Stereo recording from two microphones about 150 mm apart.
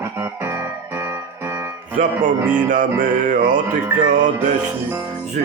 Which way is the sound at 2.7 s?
60° right (ahead or behind).